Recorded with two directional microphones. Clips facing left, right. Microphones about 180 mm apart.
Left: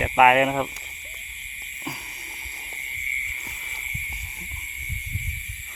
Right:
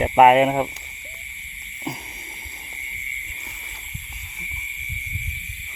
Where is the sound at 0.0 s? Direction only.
30° right (ahead or behind).